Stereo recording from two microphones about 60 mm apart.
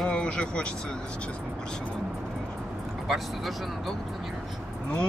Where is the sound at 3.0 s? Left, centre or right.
Centre.